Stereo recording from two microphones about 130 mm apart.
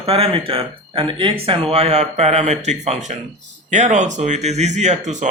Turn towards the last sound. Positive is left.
turn(degrees=-65)  # may be behind; listen again after turning